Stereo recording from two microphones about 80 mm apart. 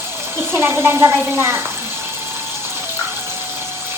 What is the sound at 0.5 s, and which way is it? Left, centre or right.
A woman's voice, right.